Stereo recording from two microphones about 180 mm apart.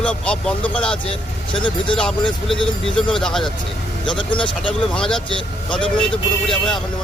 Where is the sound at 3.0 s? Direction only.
5° left (ahead or behind).